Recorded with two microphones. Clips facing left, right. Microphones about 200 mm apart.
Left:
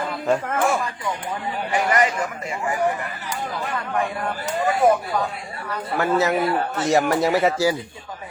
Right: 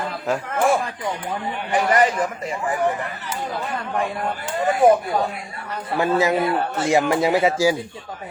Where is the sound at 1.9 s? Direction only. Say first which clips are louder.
Right 4 dB; 35° right (ahead or behind).